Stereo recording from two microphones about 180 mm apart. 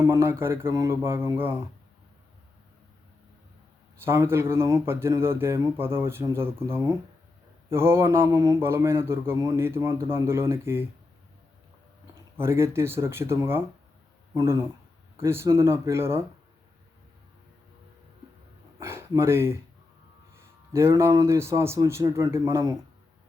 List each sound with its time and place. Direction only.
0.0 s a man's voice: 15° right (ahead or behind)
4.0 s a man's voice: 15° right (ahead or behind)
12.4 s a man's voice: 15° right (ahead or behind)
18.8 s a sound: 15° right (ahead or behind)
20.3 s a man's voice: 15° right (ahead or behind)